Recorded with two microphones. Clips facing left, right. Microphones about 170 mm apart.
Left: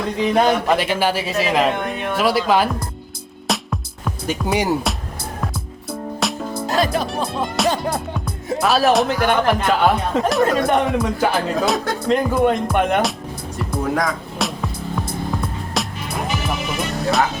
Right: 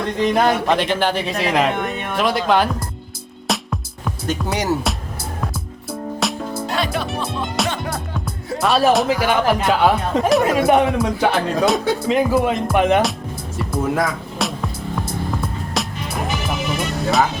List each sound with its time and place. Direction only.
0.0 s speech: centre (ahead or behind)
3.4 s music: centre (ahead or behind)
4.4 s speech: 10° left (ahead or behind)
6.1 s music: centre (ahead or behind)
6.7 s music: 40° left (ahead or behind)
7.6 s music: centre (ahead or behind)
8.6 s speech: centre (ahead or behind)
13.6 s music: 5° right (ahead or behind)
17.0 s speech: centre (ahead or behind)